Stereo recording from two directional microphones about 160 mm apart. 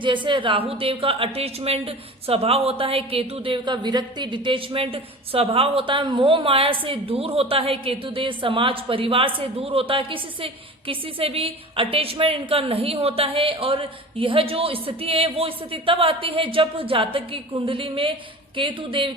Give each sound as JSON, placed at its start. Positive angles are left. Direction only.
{"t": 0.0, "sound": "a woman's voice", "side_deg": -30}